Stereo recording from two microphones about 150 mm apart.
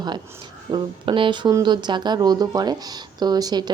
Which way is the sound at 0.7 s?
35° right (ahead or behind).